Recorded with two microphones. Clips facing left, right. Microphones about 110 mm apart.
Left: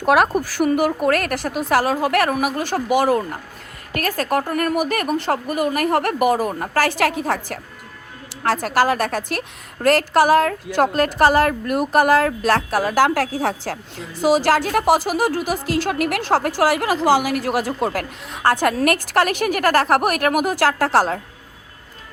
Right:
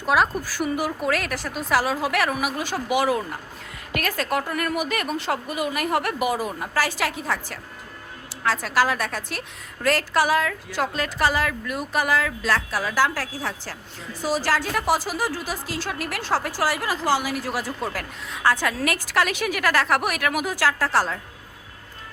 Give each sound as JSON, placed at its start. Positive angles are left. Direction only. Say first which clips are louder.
{"t": 0.0, "sound": "a woman's voice", "louder": "left 5 dB", "side_deg": 60}
{"t": 14.2, "sound": "a woman's voice", "louder": "left 8 dB", "side_deg": 75}